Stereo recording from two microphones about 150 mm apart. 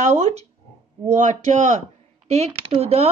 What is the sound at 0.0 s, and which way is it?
Speech, 45° right (ahead or behind).